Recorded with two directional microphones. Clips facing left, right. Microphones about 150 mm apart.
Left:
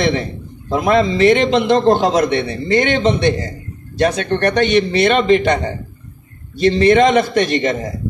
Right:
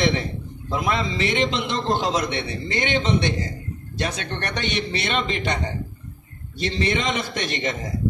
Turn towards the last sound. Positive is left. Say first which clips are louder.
# left 11 dB
turn(degrees=60)  # may be behind; listen again after turning